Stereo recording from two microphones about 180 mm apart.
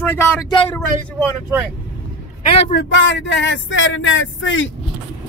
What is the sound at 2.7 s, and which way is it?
Speech, 85° left.